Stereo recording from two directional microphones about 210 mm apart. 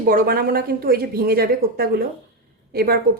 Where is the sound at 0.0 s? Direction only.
45° right (ahead or behind).